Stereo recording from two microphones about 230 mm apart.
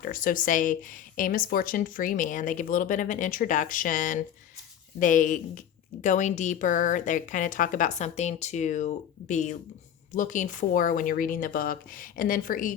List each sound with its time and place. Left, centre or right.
0.0 s a woman's voice: left